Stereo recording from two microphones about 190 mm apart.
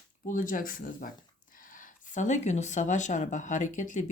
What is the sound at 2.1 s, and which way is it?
Speech, 40° left (ahead or behind).